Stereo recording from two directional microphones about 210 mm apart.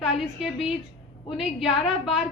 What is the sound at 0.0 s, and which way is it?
A woman's voice, centre (ahead or behind).